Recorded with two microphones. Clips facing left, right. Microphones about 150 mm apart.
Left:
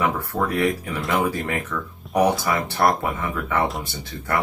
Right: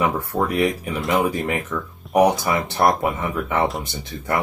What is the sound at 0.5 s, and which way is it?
Speech, 20° right (ahead or behind).